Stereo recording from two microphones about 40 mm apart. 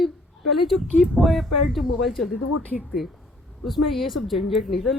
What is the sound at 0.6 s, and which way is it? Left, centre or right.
Speech, centre.